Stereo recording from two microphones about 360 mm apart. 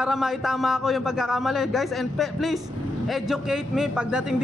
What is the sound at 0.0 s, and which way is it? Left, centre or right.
A man's voice, centre.